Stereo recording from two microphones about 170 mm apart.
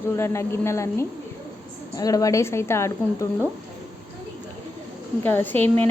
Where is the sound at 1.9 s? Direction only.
20° left (ahead or behind).